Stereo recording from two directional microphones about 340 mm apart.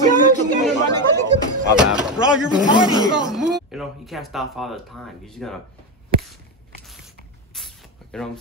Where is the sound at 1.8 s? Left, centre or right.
Centre.